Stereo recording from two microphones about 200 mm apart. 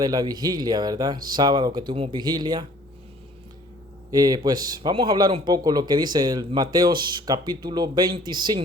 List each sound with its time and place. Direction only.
0.0 s a man's voice: 20° right (ahead or behind)
4.1 s a man's voice: 20° right (ahead or behind)